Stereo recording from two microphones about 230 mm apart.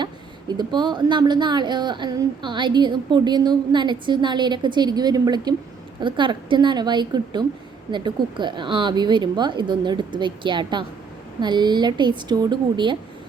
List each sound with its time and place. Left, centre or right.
0.0 s speech: centre